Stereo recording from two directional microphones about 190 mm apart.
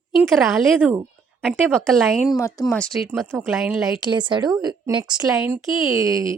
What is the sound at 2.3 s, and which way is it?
Speech, 15° left (ahead or behind).